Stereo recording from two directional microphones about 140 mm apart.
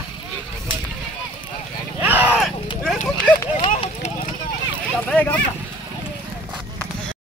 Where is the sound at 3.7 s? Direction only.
60° left (ahead or behind).